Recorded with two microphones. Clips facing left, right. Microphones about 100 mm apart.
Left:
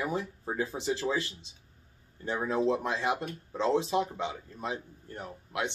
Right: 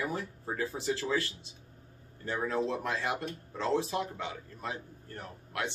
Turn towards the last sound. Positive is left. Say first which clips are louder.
# left 2 dB
turn(degrees=20)  # may be behind; listen again after turning